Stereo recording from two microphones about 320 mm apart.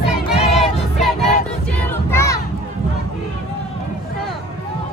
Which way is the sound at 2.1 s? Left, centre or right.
Centre.